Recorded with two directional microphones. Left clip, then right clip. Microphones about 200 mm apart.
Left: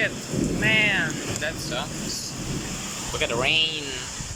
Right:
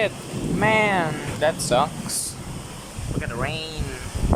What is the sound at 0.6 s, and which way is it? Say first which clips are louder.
Speech: right 2 dB; 25° right (ahead or behind).